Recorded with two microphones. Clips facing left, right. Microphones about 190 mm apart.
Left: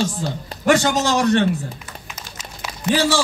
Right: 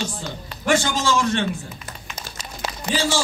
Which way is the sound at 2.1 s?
35° right (ahead or behind).